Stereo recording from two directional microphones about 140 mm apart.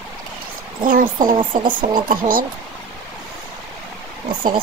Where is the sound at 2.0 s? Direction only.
90° right.